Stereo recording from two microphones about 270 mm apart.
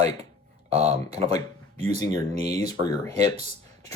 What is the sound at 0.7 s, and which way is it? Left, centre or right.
Speech, right.